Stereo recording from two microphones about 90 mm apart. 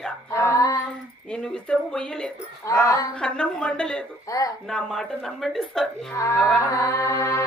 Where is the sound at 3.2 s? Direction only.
10° left (ahead or behind).